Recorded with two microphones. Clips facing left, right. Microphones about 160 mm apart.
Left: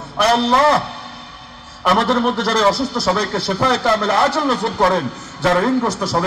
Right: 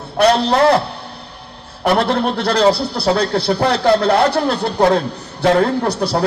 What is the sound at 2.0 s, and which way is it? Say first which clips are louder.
A man's voice: even; 65° right (ahead or behind).